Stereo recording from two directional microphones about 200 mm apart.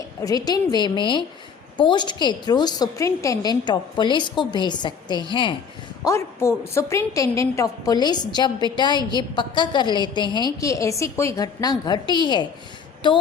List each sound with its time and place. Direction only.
0.2 s a woman's voice: 20° left (ahead or behind)